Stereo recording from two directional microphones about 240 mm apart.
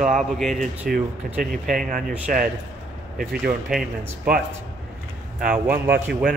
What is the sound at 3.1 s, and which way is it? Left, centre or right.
Speech, centre.